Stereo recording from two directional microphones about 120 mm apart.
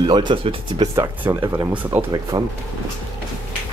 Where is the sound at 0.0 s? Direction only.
40° right (ahead or behind).